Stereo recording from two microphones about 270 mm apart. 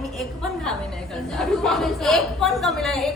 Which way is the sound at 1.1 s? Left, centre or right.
Centre.